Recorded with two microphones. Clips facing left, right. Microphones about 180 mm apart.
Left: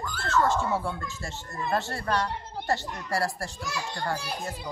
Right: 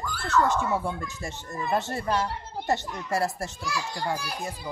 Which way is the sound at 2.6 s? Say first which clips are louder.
Right 2 dB; 20° right (ahead or behind).